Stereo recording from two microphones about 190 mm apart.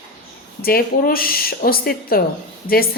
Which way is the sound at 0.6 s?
50° left (ahead or behind).